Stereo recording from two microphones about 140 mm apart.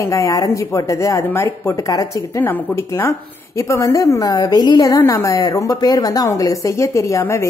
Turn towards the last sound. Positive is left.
turn(degrees=20)  # may be behind; listen again after turning